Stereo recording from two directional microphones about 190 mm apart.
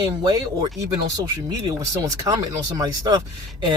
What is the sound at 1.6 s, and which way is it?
Speech, 15° right (ahead or behind).